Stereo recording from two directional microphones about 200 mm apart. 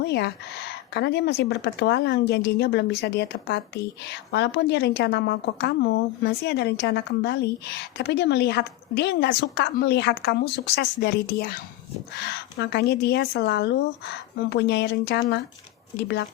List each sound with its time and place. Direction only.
0.0 s speech: 55° left (ahead or behind)
12.1 s speech: 55° left (ahead or behind)